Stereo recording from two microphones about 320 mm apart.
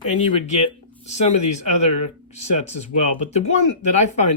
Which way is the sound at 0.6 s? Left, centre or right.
Left.